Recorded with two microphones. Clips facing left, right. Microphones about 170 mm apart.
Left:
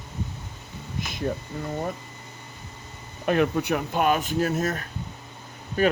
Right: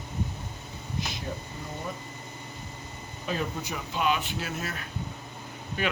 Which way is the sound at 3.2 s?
65° left (ahead or behind).